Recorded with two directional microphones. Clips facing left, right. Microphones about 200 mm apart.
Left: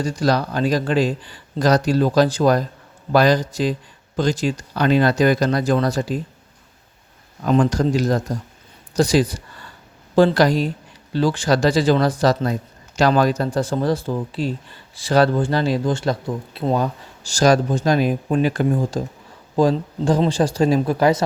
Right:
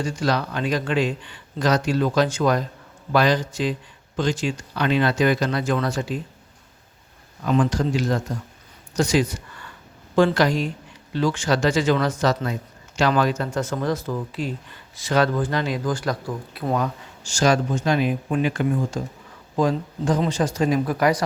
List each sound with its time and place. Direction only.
0.0 s speech: 35° left (ahead or behind)
7.4 s speech: 40° left (ahead or behind); by 21.2 s 25° left (ahead or behind)